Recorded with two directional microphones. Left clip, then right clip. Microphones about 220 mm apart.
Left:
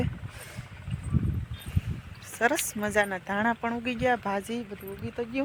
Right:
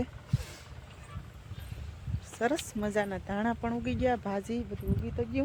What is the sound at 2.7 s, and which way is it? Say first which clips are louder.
Speech: left 5 dB; 5° left (ahead or behind).